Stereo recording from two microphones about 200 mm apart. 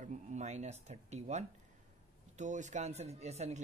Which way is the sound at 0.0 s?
35° right (ahead or behind).